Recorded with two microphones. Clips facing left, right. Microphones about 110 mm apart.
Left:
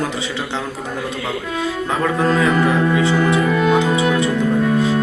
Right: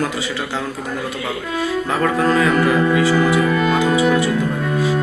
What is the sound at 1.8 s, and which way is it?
Speech, 10° left (ahead or behind).